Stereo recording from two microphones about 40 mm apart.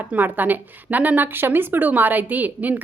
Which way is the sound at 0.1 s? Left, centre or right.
Right.